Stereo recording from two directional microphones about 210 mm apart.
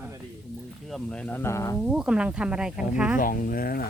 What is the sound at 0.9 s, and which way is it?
Speech, 5° left (ahead or behind).